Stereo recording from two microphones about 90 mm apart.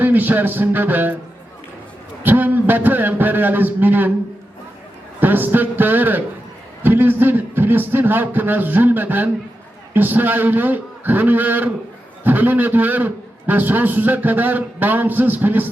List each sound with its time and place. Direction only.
0.0 s a man's voice: 20° right (ahead or behind)
2.2 s a man's voice: 20° right (ahead or behind)
5.2 s a man's voice: 20° right (ahead or behind)